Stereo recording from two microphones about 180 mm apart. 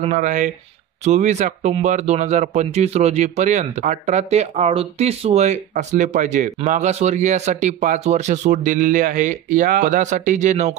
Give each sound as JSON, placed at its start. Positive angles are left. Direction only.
{"t": 0.0, "sound": "speech", "side_deg": -40}